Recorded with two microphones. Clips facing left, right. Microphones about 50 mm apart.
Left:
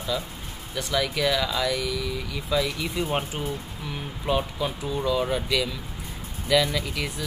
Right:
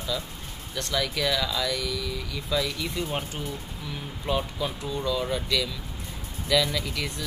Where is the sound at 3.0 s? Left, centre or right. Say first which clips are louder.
Left 4 dB; left.